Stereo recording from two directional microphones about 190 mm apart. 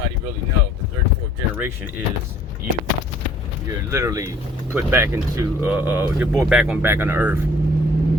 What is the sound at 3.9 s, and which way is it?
Speech, 15° right (ahead or behind).